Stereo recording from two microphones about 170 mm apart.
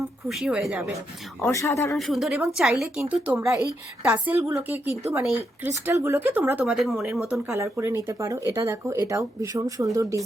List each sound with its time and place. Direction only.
0.3 s a woman's voice: centre (ahead or behind)
1.4 s speech: 15° left (ahead or behind)
2.0 s a woman's voice: centre (ahead or behind); by 4.6 s 15° right (ahead or behind)
5.8 s speech: 15° right (ahead or behind)
6.7 s a woman's voice: centre (ahead or behind); by 10.2 s 20° right (ahead or behind)